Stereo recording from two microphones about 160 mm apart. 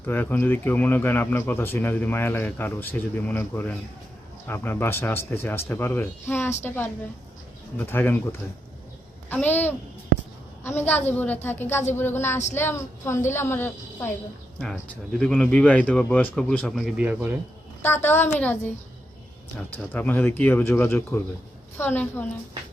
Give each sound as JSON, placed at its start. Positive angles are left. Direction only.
{"t": 0.0, "sound": "speech", "side_deg": 15}
{"t": 15.2, "sound": "speech", "side_deg": 5}
{"t": 17.8, "sound": "speech", "side_deg": 15}
{"t": 19.5, "sound": "speech", "side_deg": 10}